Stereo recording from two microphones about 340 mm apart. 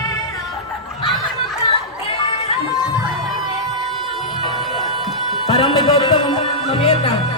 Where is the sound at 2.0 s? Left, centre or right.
Centre.